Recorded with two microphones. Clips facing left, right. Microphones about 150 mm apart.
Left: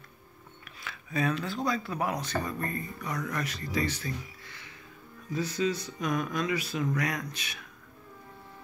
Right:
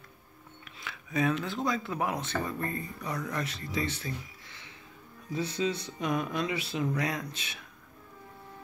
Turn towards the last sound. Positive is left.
turn(degrees=-25)  # may be behind; listen again after turning